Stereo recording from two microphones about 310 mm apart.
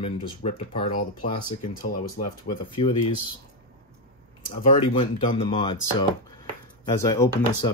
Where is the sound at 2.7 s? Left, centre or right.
Centre.